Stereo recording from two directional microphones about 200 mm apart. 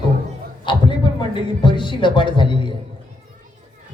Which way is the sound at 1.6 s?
25° left (ahead or behind).